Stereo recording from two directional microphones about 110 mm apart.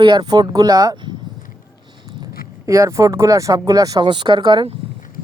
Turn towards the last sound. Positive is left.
turn(degrees=-45)  # may be behind; listen again after turning